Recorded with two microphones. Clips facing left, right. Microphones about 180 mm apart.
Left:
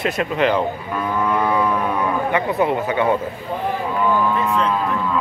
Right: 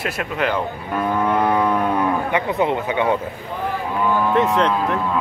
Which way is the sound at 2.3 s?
20° right (ahead or behind).